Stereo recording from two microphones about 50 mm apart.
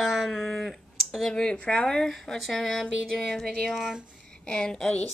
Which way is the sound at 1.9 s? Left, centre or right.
Centre.